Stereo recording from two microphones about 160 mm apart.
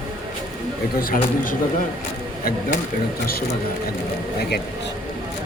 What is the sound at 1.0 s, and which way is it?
Speech, 60° left (ahead or behind).